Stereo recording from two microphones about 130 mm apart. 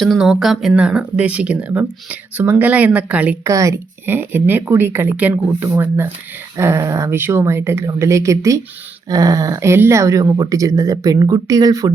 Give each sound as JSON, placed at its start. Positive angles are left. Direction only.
{"t": 0.0, "sound": "speech", "side_deg": 0}
{"t": 3.4, "sound": "speech", "side_deg": -25}